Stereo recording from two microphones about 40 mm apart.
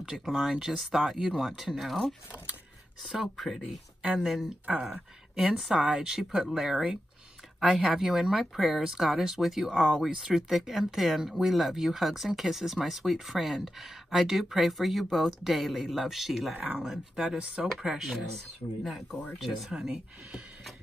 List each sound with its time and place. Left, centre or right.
0.0 s speech: centre
0.3 s speech: centre
3.0 s speech: centre
3.3 s speech: centre
17.1 s speech: right
17.7 s speech: centre